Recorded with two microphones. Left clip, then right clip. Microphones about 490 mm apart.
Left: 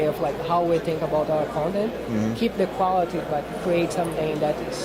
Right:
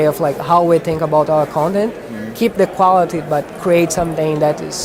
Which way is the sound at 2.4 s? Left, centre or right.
Right.